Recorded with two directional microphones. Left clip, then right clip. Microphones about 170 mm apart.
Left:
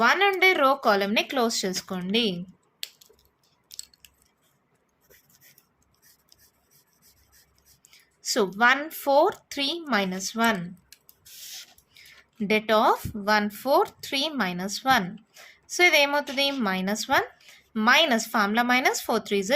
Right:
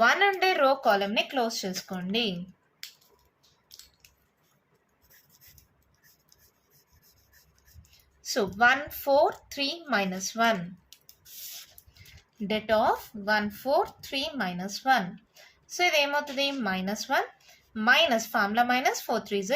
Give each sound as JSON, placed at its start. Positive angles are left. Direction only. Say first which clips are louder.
{"t": 0.0, "sound": "speech", "louder": "left 2 dB", "side_deg": 35}
{"t": 8.2, "sound": "a woman's voice", "louder": "left 2 dB", "side_deg": 45}
{"t": 12.5, "sound": "a woman's voice", "louder": "left 4 dB", "side_deg": 55}